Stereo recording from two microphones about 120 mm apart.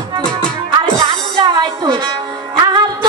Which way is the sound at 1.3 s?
35° right (ahead or behind).